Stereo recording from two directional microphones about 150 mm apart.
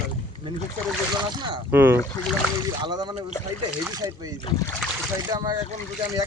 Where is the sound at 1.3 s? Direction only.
30° right (ahead or behind).